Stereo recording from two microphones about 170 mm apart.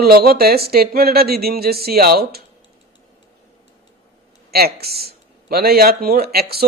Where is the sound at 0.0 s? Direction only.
65° right (ahead or behind).